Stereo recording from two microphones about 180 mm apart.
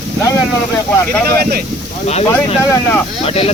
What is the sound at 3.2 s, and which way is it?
Speech, 30° left (ahead or behind).